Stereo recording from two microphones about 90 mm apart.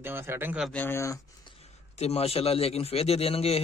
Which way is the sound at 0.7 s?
25° left (ahead or behind).